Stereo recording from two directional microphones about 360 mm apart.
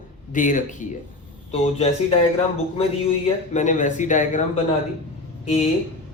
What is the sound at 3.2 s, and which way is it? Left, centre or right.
Speech, centre.